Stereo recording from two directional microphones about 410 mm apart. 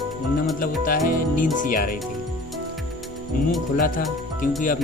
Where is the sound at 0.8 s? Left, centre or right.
Centre.